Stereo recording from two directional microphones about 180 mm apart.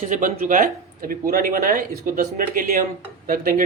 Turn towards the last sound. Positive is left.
turn(degrees=-50)  # may be behind; listen again after turning